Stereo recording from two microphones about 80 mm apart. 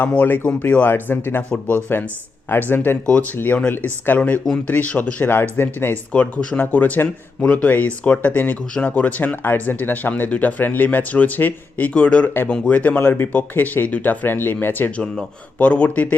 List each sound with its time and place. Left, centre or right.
0.0 s speech: left
6.1 s speech: centre